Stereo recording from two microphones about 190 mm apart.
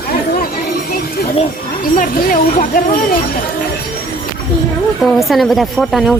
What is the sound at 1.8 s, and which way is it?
Speech, 45° left (ahead or behind).